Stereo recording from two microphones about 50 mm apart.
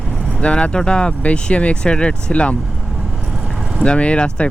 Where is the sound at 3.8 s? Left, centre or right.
Left.